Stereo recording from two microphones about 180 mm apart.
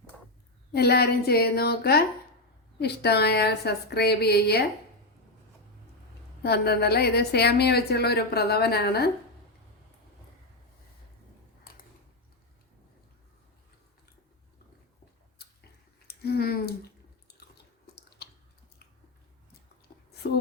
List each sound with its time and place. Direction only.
0.7 s a woman's voice: 65° left (ahead or behind)
6.4 s a woman's voice: 65° left (ahead or behind)
11.6 s mechanisms: 55° left (ahead or behind)
16.0 s a sound: 60° left (ahead or behind)
18.2 s chewing: 65° left (ahead or behind)
19.9 s a sound: 50° left (ahead or behind)